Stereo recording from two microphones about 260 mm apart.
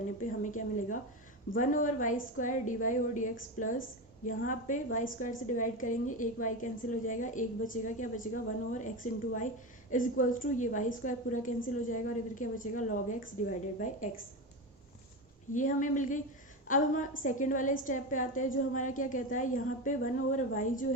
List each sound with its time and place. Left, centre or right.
0.2 s a woman's voice: left
15.5 s a woman's voice: left